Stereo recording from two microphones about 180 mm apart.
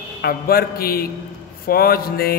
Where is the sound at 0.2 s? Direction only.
60° left (ahead or behind).